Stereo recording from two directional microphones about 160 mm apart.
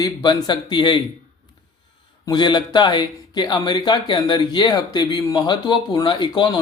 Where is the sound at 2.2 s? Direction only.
25° left (ahead or behind).